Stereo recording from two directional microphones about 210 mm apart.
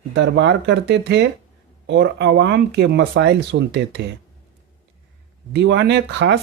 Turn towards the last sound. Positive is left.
turn(degrees=-55)  # may be behind; listen again after turning